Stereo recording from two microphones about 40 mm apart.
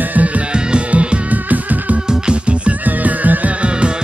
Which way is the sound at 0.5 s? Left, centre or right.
Right.